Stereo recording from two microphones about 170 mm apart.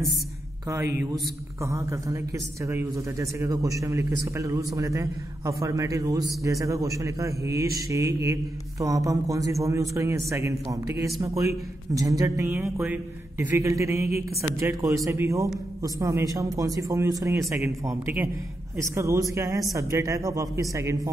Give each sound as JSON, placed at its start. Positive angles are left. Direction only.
{"t": 1.6, "sound": "a man's voice", "side_deg": -15}